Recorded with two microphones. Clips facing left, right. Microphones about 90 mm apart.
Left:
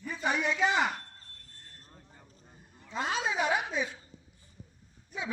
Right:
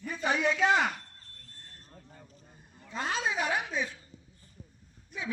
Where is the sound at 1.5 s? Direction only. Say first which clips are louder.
Right 2 dB; centre (ahead or behind).